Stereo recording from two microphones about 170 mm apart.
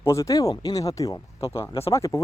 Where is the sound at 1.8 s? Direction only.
20° left (ahead or behind).